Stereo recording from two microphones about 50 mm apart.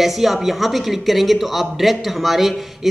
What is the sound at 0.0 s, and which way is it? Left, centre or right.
Speech, centre.